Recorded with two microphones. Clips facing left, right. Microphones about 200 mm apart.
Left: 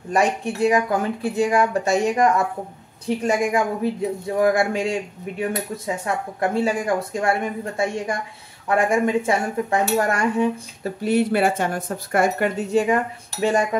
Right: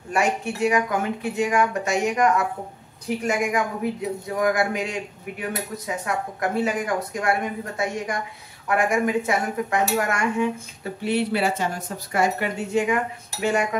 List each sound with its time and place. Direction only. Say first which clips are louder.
0.1 s speech: left 3 dB; 35° left (ahead or behind)
10.8 s speech: left 4 dB; 45° left (ahead or behind)
12.5 s speech: left 3 dB; 35° left (ahead or behind)